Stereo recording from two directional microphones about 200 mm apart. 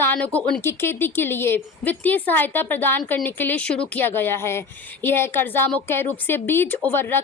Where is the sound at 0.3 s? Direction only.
10° left (ahead or behind).